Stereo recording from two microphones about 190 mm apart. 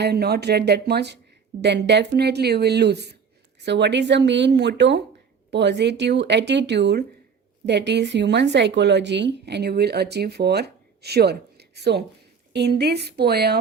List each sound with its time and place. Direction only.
0.0 s speech: 55° right (ahead or behind)